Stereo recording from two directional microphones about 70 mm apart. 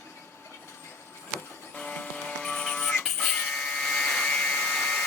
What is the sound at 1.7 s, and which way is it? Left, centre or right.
Music, centre.